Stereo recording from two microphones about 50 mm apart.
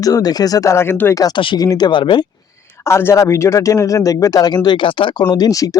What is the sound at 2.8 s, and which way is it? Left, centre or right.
Speech, left.